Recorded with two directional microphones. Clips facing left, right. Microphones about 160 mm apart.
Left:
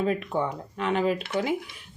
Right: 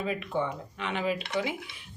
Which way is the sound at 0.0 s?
40° left (ahead or behind).